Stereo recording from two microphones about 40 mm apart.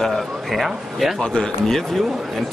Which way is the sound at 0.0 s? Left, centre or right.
Centre.